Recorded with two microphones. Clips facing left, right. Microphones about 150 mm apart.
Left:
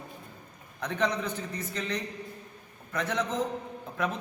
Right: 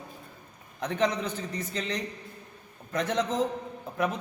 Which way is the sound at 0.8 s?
25° right (ahead or behind).